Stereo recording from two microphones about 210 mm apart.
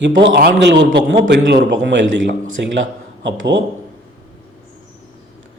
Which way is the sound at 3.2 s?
55° right (ahead or behind).